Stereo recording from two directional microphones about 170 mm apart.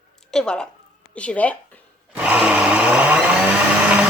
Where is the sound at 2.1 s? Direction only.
5° right (ahead or behind).